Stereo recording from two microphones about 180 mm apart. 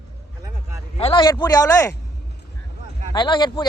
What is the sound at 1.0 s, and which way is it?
Speech, 25° left (ahead or behind).